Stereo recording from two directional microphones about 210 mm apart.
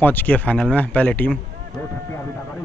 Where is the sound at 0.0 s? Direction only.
10° left (ahead or behind).